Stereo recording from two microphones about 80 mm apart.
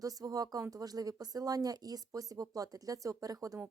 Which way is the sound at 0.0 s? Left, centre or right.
Right.